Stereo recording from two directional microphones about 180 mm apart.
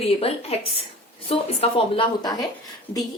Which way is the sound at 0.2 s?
35° left (ahead or behind).